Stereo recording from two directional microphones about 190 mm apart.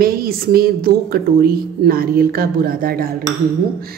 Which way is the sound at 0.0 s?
50° right (ahead or behind).